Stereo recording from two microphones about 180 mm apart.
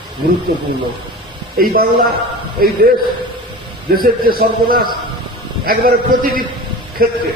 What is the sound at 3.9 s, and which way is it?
A man's voice, 55° right (ahead or behind).